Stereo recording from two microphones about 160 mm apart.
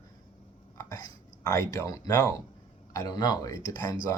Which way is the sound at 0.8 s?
20° left (ahead or behind).